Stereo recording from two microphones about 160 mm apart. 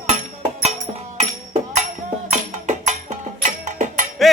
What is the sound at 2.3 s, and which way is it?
Music, 50° right (ahead or behind).